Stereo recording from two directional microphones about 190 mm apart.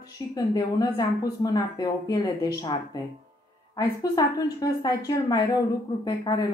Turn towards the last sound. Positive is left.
turn(degrees=20)  # may be behind; listen again after turning